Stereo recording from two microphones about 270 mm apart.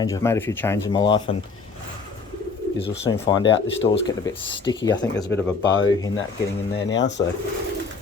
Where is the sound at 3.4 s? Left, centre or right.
Left.